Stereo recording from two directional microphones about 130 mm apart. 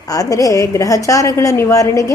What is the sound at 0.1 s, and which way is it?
A woman's voice, 25° left (ahead or behind).